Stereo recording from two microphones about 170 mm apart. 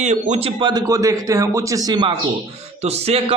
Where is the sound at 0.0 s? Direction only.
40° right (ahead or behind).